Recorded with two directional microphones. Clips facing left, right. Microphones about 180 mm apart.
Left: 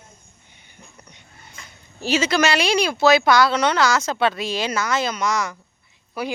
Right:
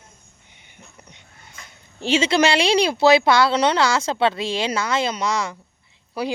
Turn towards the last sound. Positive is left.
turn(degrees=-30)  # may be behind; listen again after turning